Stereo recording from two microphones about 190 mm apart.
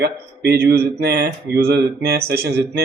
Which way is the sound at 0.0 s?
60° right (ahead or behind).